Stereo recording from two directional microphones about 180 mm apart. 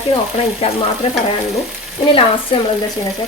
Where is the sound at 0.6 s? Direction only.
30° left (ahead or behind).